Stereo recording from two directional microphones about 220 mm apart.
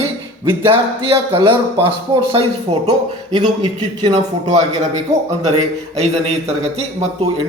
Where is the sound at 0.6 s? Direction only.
25° right (ahead or behind).